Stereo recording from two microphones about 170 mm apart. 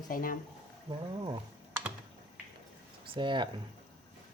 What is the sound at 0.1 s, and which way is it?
Speech, 55° left (ahead or behind).